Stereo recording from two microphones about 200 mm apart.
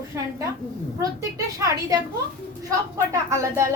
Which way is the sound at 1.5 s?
15° right (ahead or behind).